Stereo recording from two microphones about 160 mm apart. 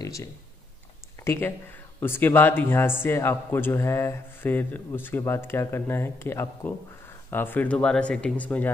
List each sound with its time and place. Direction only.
0.0 s a man's voice: 20° left (ahead or behind)